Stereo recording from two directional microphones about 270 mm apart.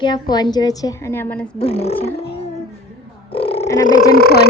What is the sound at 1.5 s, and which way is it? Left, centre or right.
Speech, left.